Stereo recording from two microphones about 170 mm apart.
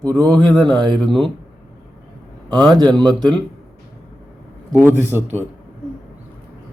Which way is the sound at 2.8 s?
5° left (ahead or behind).